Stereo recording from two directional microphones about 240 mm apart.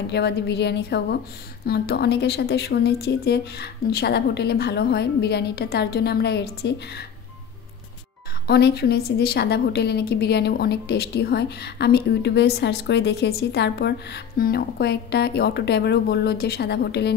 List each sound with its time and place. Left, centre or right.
0.0 s a woman's voice: left
8.5 s a woman's voice: left